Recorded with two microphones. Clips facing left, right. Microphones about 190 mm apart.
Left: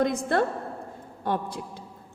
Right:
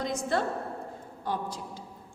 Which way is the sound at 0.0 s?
55° left (ahead or behind).